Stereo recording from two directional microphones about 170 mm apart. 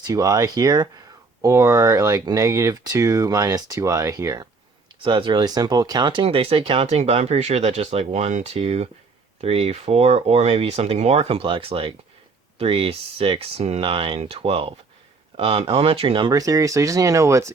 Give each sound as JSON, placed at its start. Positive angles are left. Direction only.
{"t": 0.1, "sound": "speech", "side_deg": -20}
{"t": 5.0, "sound": "speech", "side_deg": -30}